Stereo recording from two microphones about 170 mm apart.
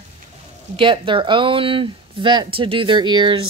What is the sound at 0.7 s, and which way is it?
Speech, 30° right (ahead or behind).